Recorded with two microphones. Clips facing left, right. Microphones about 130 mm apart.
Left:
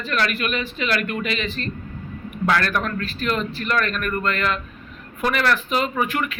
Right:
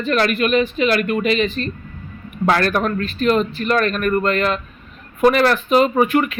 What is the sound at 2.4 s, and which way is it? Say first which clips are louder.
Speech: right 4 dB; 30° right (ahead or behind).